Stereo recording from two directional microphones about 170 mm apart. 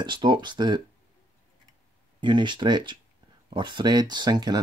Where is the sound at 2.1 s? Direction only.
25° right (ahead or behind).